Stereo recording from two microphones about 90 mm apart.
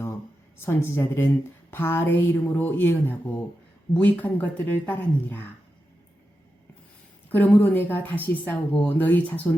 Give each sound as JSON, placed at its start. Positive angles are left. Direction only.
{"t": 0.6, "sound": "speech", "side_deg": 30}
{"t": 7.3, "sound": "speech", "side_deg": 20}